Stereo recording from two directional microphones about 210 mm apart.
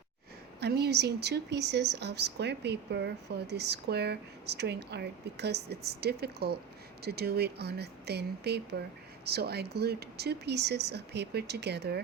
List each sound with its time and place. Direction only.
0.6 s speech: 50° right (ahead or behind)